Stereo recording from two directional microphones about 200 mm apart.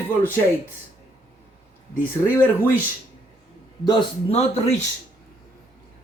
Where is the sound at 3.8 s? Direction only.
25° left (ahead or behind).